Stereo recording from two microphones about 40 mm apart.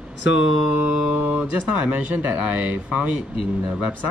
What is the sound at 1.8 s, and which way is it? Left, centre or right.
Speech, right.